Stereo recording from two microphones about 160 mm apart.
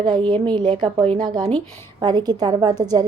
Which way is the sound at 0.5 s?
30° right (ahead or behind).